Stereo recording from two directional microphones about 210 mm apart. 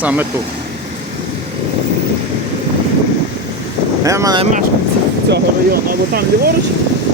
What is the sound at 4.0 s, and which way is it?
Speech, 15° right (ahead or behind).